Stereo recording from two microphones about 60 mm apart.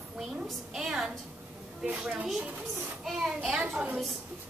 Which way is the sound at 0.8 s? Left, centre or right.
Centre.